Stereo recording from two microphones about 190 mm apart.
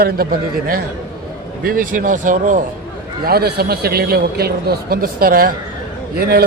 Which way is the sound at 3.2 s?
55° right (ahead or behind).